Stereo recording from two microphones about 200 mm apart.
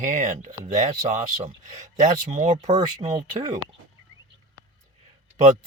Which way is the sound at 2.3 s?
35° right (ahead or behind).